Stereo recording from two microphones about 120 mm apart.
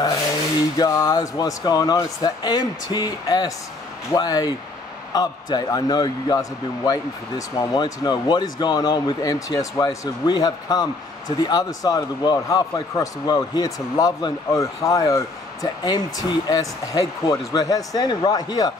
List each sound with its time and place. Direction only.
0.7 s speech: 30° left (ahead or behind)